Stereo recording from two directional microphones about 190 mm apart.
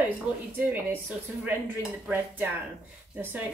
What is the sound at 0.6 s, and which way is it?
A woman's voice, 10° right (ahead or behind).